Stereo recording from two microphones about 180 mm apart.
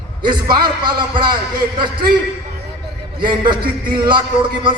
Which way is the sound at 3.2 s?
25° right (ahead or behind).